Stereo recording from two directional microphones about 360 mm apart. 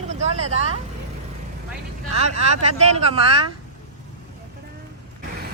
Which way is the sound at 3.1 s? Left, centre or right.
Centre.